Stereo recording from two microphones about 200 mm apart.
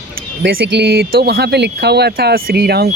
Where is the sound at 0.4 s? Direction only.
60° right (ahead or behind).